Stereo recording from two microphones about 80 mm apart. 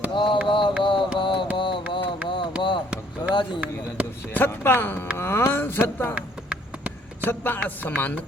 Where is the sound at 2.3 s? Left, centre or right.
Left.